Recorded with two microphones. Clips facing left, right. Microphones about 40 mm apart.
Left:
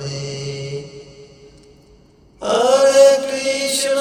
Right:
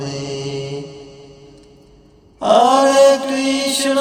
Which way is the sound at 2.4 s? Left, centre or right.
Right.